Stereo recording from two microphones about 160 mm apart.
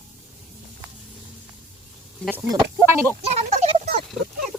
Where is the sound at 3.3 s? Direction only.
40° right (ahead or behind).